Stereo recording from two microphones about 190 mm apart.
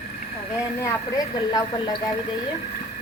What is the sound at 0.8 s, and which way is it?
Speech, 20° left (ahead or behind).